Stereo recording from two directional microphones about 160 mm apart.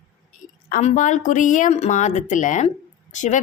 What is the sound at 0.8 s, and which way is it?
A woman's voice, 50° left (ahead or behind).